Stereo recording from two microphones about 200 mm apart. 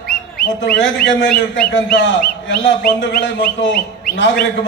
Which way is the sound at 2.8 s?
50° left (ahead or behind).